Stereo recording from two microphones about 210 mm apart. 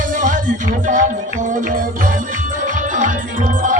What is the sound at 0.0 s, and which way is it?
Music, 40° right (ahead or behind).